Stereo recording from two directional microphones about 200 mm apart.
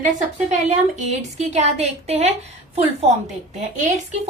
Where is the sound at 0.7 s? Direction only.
35° right (ahead or behind).